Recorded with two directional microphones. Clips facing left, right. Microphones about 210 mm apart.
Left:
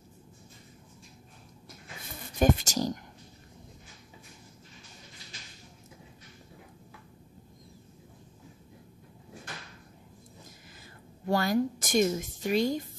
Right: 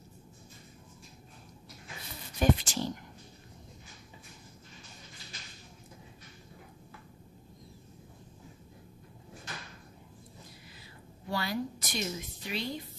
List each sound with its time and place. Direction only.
2.3 s a woman's voice: 45° left (ahead or behind)
11.2 s a woman's voice: 45° left (ahead or behind)